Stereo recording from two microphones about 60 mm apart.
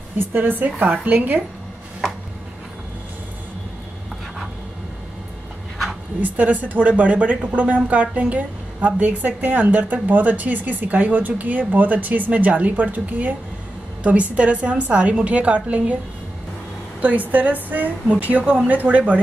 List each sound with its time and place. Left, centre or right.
0.2 s speech: right
6.2 s speech: right
14.3 s speech: right
17.0 s speech: right